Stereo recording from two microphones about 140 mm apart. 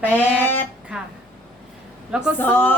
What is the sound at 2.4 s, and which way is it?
Speech, 15° left (ahead or behind).